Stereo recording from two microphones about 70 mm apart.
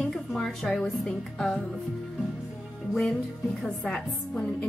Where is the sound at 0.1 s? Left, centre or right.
Centre.